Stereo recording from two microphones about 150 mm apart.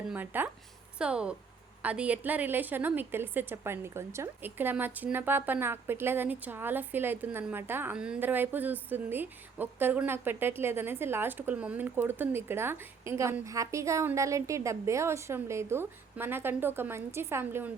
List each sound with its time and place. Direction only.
0.1 s a woman's voice: 10° right (ahead or behind)